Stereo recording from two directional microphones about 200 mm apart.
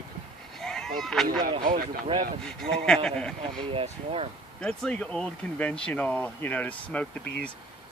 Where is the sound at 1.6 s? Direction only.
45° right (ahead or behind).